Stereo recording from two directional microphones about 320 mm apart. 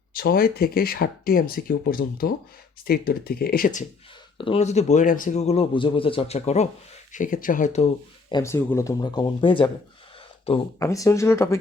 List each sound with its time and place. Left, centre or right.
0.2 s a man's voice: left
8.3 s speech: centre